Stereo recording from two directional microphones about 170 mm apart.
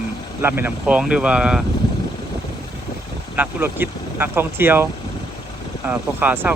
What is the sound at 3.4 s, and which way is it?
Speech, 10° right (ahead or behind).